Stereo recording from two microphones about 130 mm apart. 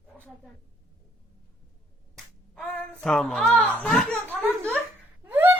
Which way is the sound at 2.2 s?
10° left (ahead or behind).